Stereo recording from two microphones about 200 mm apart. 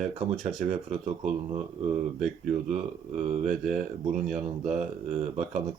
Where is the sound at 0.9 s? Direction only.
35° right (ahead or behind).